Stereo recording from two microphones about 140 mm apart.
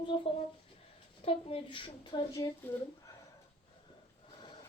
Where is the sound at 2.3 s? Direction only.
25° left (ahead or behind).